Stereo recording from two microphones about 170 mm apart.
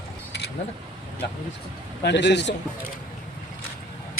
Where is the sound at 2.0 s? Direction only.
90° left.